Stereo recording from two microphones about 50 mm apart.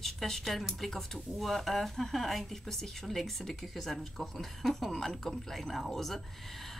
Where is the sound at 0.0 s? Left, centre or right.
Centre.